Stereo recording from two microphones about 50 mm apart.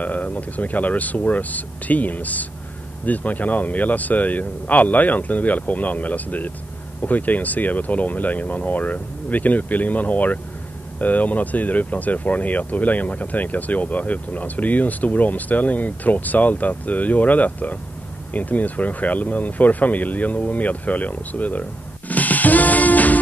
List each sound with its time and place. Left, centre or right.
0.0 s speech: left
22.1 s music: left